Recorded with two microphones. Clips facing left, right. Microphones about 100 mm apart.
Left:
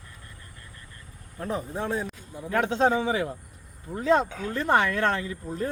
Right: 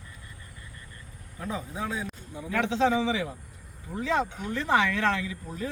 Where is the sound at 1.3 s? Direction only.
50° left (ahead or behind).